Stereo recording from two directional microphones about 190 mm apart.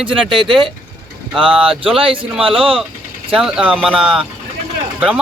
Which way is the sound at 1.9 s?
30° right (ahead or behind).